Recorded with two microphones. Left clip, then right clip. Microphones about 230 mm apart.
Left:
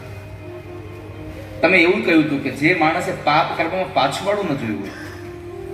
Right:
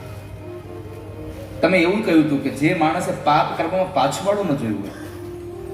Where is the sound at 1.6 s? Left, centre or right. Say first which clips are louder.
Left 3 dB; right.